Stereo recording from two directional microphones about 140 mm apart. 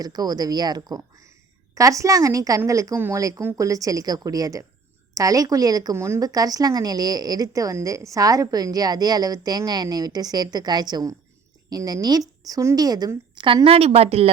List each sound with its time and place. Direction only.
0.0 s a woman's voice: 30° right (ahead or behind); by 14.3 s 45° right (ahead or behind)